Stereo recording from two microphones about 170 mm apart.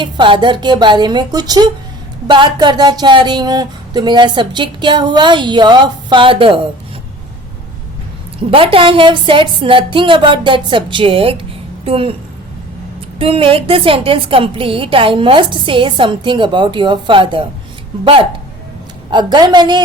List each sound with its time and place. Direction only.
0.0 s speech: 25° right (ahead or behind)
8.4 s a woman's voice: 30° right (ahead or behind)
13.1 s a woman's voice: 35° right (ahead or behind)